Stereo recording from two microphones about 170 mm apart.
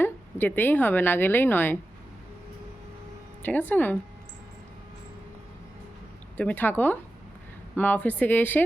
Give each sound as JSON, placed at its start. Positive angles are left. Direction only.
{"t": 0.0, "sound": "speech", "side_deg": 10}
{"t": 3.4, "sound": "a woman's voice", "side_deg": 10}
{"t": 6.3, "sound": "a woman's voice", "side_deg": 10}